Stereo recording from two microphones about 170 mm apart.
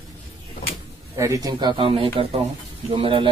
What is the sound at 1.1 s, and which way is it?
Speech, 20° right (ahead or behind).